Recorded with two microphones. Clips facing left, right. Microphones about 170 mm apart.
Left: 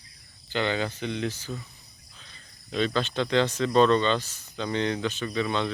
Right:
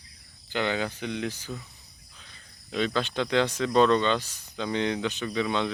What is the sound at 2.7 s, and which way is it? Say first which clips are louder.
Speech: left 1 dB; 10° right (ahead or behind).